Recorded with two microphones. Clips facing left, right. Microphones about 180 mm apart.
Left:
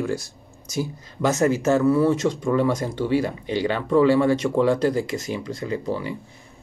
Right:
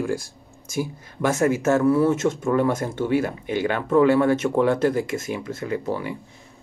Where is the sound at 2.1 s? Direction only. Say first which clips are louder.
Even; 50° right (ahead or behind).